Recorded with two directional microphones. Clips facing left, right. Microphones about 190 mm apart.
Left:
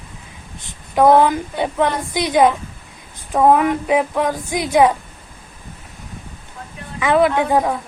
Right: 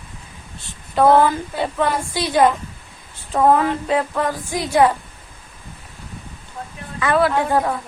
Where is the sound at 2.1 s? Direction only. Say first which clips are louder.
Left 2 dB; 15° left (ahead or behind).